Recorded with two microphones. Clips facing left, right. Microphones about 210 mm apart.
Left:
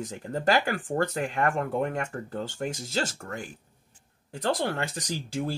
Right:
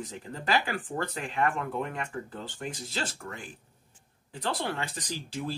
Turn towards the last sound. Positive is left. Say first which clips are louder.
# left 4 dB
turn(degrees=45)  # may be behind; listen again after turning